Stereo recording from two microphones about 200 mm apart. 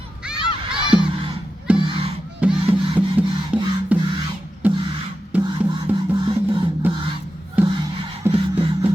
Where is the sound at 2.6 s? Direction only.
25° right (ahead or behind).